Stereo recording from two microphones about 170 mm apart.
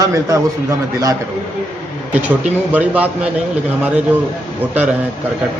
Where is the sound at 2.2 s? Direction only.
10° right (ahead or behind).